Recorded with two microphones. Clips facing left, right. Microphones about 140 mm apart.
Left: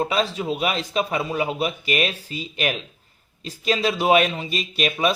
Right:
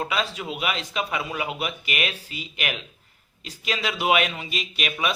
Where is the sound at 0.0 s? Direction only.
30° left (ahead or behind).